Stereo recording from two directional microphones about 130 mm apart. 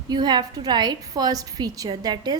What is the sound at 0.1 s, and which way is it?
A woman's voice, 35° right (ahead or behind).